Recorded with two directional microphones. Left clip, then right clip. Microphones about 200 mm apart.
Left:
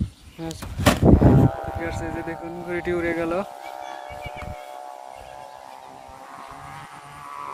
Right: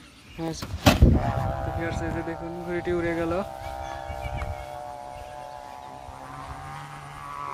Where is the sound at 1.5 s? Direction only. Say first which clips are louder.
Left 1 dB; centre (ahead or behind); by 3.5 s 15° left (ahead or behind).